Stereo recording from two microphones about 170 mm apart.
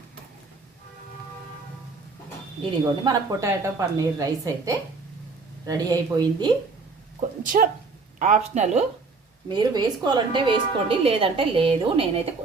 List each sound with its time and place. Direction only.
2.6 s speech: 25° right (ahead or behind)
7.4 s speech: 50° right (ahead or behind)
9.5 s a woman's voice: 25° right (ahead or behind)